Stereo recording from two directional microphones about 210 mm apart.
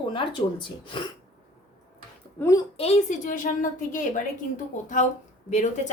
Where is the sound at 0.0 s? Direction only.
25° left (ahead or behind).